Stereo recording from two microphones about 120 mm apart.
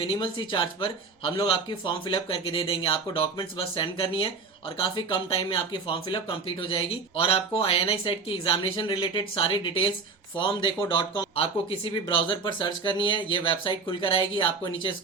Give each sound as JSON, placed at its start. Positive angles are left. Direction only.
{"t": 0.0, "sound": "speech", "side_deg": 45}